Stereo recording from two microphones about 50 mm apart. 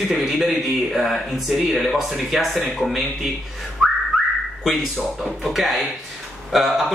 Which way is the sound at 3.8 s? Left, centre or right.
Centre.